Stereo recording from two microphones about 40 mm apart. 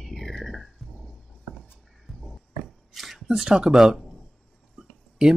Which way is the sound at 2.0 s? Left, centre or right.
Centre.